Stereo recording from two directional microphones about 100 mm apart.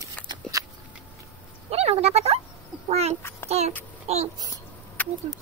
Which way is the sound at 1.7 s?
90° right.